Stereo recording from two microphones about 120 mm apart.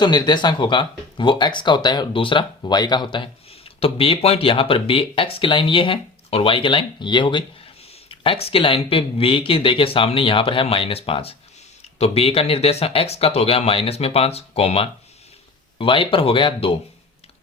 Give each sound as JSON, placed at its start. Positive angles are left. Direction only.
{"t": 0.0, "sound": "speech", "side_deg": 40}
{"t": 15.8, "sound": "speech", "side_deg": 50}